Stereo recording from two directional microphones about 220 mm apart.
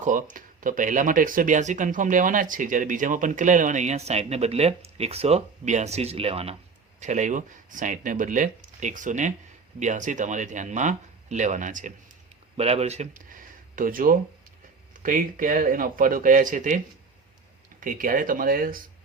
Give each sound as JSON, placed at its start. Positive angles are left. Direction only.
{"t": 0.0, "sound": "speech", "side_deg": -35}